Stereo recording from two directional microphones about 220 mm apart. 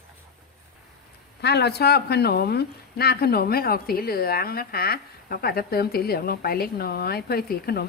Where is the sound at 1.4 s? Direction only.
50° left (ahead or behind).